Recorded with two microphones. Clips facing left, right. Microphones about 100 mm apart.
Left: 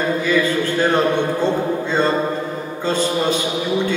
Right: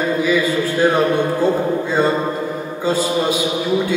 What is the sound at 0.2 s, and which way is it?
A man's voice, 10° right (ahead or behind).